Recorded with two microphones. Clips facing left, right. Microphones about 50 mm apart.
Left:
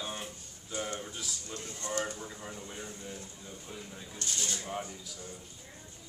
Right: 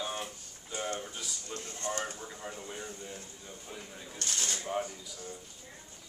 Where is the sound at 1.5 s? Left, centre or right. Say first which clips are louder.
Right 1 dB; right.